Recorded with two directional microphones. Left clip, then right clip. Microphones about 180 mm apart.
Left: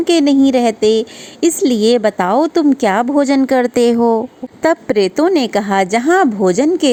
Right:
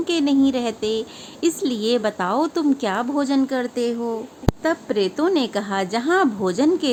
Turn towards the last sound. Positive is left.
turn(degrees=30)  # may be behind; listen again after turning